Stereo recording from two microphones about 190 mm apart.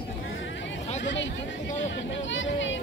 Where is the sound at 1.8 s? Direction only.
75° left (ahead or behind).